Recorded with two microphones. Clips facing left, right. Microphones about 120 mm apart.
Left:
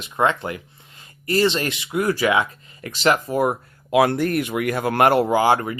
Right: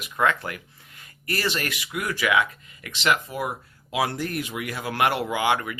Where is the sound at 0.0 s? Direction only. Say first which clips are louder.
Left 3 dB; 25° left (ahead or behind).